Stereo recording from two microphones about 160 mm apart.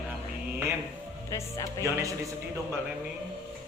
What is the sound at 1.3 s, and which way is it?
Music, 20° left (ahead or behind).